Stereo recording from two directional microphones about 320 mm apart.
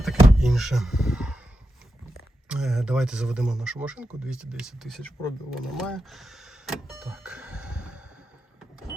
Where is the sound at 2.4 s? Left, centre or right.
Centre.